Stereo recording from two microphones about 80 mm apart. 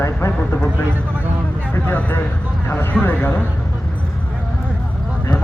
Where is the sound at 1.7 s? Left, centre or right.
Left.